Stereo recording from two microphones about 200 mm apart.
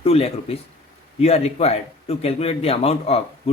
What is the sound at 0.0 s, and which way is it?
A man's voice, 30° left (ahead or behind).